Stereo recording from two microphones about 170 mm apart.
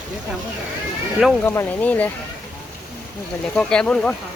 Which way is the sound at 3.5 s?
5° left (ahead or behind).